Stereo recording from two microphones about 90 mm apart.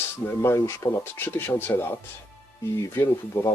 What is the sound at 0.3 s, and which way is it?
Speech, 30° left (ahead or behind).